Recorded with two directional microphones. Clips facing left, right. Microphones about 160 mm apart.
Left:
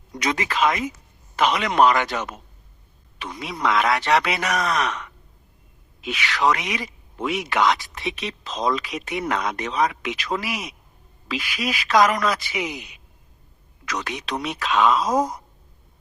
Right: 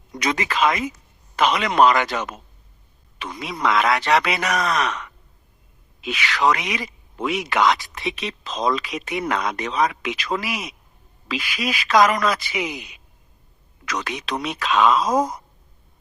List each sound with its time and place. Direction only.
0.3 s speech: 90° right